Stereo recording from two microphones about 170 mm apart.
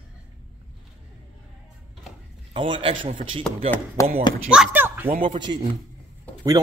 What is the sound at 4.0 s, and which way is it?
Speech, 20° left (ahead or behind).